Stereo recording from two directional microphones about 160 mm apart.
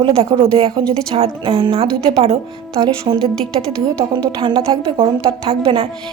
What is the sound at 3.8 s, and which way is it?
A woman's voice, 30° right (ahead or behind).